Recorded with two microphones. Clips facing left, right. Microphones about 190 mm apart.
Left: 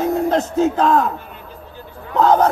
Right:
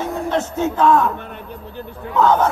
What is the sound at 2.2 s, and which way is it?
Speech, 35° left (ahead or behind).